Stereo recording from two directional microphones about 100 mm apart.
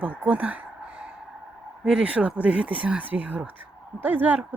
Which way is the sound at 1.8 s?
10° right (ahead or behind).